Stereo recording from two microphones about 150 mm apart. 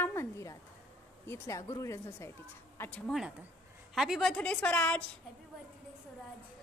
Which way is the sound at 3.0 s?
Centre (ahead or behind).